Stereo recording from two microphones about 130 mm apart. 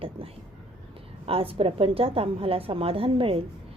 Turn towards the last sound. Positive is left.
turn(degrees=-45)  # may be behind; listen again after turning